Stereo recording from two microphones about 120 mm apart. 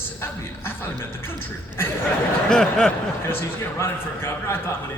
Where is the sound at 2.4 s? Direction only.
5° left (ahead or behind).